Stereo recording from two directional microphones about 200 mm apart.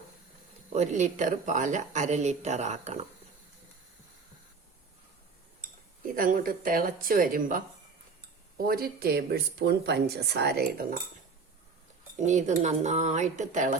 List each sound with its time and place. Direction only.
0.7 s speech: 35° right (ahead or behind)
6.1 s speech: 45° right (ahead or behind)
12.2 s speech: 35° right (ahead or behind)